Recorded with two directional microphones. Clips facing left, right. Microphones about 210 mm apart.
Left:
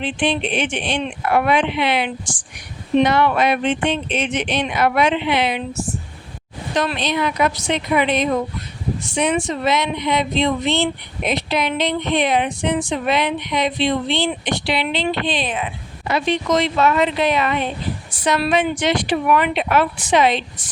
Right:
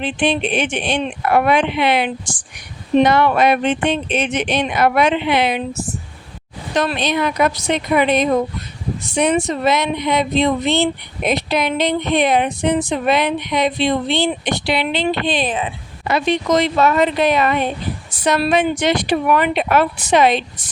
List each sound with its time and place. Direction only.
0.0 s speech: 45° right (ahead or behind)
6.7 s speech: 45° right (ahead or behind)